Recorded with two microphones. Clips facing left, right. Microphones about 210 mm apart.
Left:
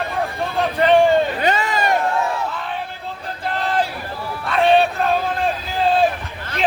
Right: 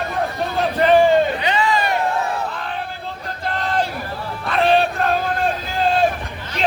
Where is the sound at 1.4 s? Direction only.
45° left (ahead or behind).